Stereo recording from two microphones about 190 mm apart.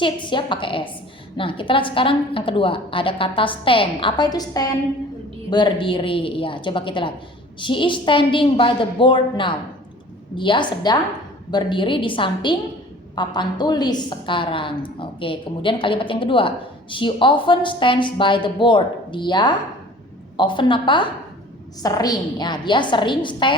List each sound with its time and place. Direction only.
0.0 s a woman's voice: 25° left (ahead or behind)